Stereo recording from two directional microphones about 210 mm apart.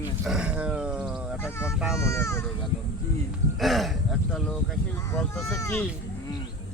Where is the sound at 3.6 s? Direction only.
Centre (ahead or behind).